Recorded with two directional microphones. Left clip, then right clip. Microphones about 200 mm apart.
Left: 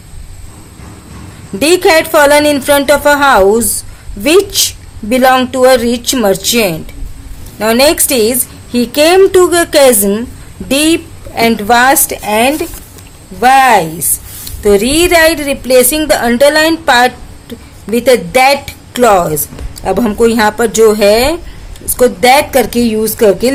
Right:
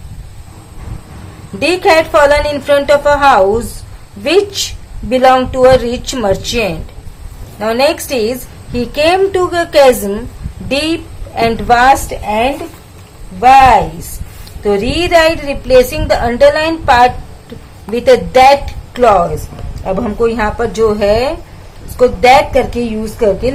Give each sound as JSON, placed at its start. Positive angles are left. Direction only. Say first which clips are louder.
{"t": 1.5, "sound": "a woman's voice", "louder": "left 2 dB", "side_deg": 30}
{"t": 19.8, "sound": "a woman's voice", "louder": "left 4 dB", "side_deg": 45}